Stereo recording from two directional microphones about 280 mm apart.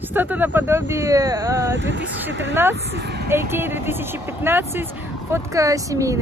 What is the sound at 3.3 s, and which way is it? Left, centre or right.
Speech, centre.